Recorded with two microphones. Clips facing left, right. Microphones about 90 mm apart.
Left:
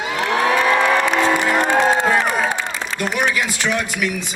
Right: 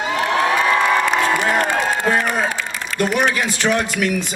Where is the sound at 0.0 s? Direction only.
35° right (ahead or behind).